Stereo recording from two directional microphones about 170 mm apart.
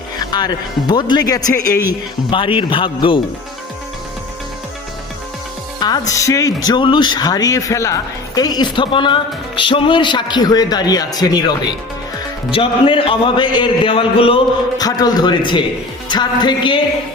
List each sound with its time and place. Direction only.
0.2 s speech: 25° left (ahead or behind)
5.8 s speech: 20° left (ahead or behind)